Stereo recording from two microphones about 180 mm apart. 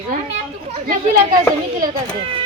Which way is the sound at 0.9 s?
50° right (ahead or behind).